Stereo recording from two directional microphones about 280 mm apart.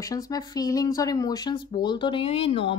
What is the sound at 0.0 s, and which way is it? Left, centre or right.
A woman's voice, centre.